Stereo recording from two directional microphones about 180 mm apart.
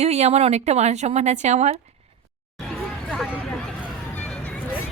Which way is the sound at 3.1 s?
5° right (ahead or behind).